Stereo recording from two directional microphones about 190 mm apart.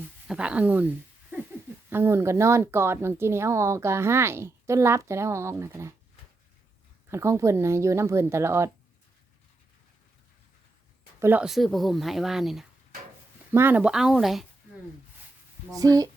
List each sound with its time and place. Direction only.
0.3 s speech: 5° right (ahead or behind)
7.1 s speech: 15° right (ahead or behind)
11.2 s speech: 10° right (ahead or behind)
13.5 s speech: 10° right (ahead or behind)
15.7 s speech: 20° right (ahead or behind)